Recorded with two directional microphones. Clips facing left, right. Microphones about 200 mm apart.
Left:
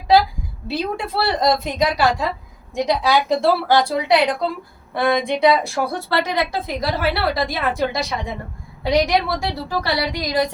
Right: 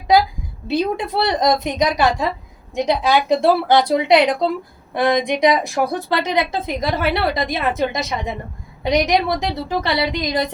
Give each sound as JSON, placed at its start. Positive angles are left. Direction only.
{"t": 0.7, "sound": "a woman's voice", "side_deg": -20}